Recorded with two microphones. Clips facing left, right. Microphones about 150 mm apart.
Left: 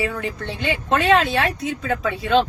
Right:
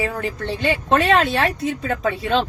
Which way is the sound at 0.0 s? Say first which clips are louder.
Right 1 dB; 35° right (ahead or behind).